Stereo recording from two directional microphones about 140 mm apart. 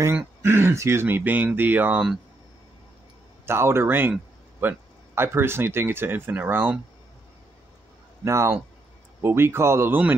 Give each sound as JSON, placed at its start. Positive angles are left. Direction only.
{"t": 0.0, "sound": "speech", "side_deg": -15}
{"t": 3.4, "sound": "speech", "side_deg": -15}
{"t": 8.2, "sound": "a man's voice", "side_deg": -20}